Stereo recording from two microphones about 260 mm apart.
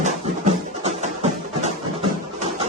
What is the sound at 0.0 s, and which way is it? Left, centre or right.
Music, right.